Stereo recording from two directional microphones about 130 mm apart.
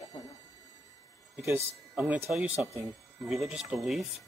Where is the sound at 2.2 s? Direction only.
5° right (ahead or behind).